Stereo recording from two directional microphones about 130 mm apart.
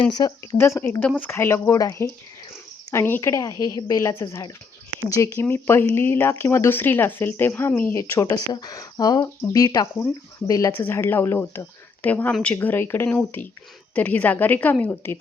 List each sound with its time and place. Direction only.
0.0 s speech: 30° left (ahead or behind)
10.7 s speech: 15° left (ahead or behind)